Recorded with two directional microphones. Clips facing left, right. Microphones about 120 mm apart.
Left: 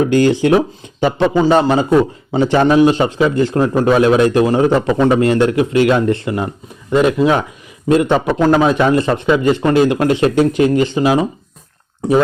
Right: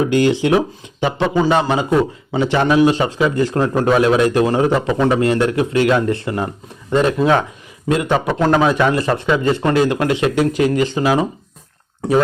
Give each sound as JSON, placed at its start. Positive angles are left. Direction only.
{"t": 0.0, "sound": "a man's voice", "side_deg": 40}
{"t": 7.9, "sound": "a man's voice", "side_deg": 30}
{"t": 8.3, "sound": "a man's voice", "side_deg": 15}